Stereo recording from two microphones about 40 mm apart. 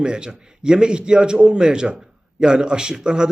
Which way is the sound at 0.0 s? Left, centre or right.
Right.